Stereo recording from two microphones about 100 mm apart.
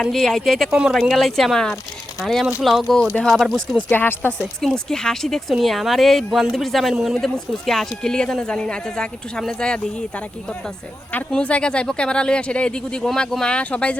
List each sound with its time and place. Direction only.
0.0 s speech: 5° left (ahead or behind)
3.9 s speech: 20° left (ahead or behind)
4.6 s speech: 5° left (ahead or behind)
11.1 s speech: 10° left (ahead or behind)